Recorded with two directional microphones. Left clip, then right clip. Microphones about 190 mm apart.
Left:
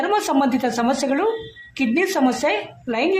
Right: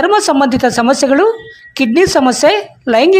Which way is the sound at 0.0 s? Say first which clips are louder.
Right 9 dB; 45° right (ahead or behind).